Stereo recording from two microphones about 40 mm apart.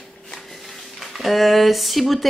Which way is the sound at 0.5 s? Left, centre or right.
Centre.